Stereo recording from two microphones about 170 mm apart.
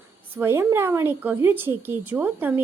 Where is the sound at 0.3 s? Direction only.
15° right (ahead or behind).